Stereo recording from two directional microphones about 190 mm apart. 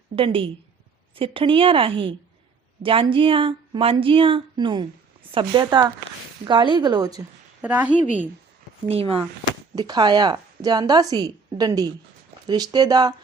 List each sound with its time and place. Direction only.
0.2 s a woman's voice: 30° right (ahead or behind)
7.6 s a woman's voice: 10° right (ahead or behind)
8.9 s a woman's voice: 30° right (ahead or behind)